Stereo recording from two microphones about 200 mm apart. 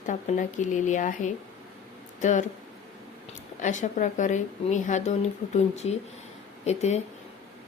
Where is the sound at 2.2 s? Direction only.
40° left (ahead or behind).